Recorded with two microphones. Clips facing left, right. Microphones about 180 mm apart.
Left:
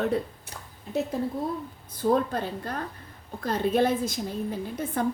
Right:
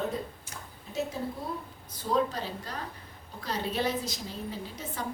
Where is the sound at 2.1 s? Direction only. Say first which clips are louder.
Left 4 dB; 55° left (ahead or behind).